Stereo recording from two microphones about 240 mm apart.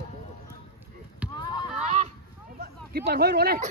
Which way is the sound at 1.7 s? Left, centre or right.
Right.